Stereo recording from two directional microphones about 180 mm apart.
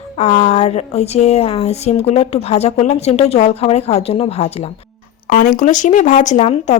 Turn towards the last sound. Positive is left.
turn(degrees=40)  # may be behind; listen again after turning